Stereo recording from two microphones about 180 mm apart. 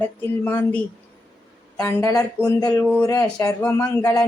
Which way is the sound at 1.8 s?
15° left (ahead or behind).